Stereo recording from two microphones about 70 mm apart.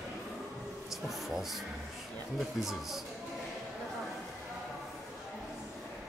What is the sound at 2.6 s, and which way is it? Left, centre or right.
Speech, centre.